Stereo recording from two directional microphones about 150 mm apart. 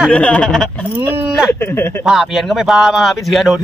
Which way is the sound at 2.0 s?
Centre (ahead or behind).